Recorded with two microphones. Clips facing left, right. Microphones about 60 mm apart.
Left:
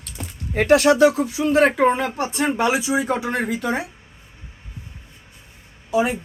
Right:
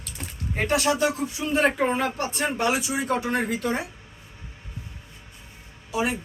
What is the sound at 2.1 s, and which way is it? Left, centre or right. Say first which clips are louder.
Speech: left 5 dB; left.